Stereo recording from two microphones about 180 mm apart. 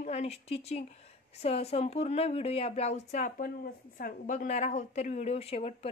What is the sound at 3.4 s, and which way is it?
A woman's voice, 55° left (ahead or behind).